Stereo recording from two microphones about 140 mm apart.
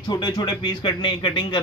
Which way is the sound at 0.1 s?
30° left (ahead or behind).